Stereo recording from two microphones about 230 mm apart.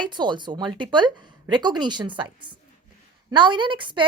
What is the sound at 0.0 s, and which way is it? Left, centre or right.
A woman's voice, centre.